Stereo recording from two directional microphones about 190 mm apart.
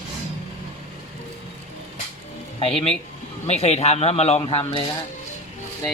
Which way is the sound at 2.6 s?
30° left (ahead or behind).